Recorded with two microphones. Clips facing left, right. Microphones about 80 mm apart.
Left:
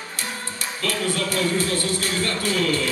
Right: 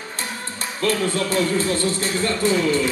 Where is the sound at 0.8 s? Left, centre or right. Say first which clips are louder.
Right 4 dB; right.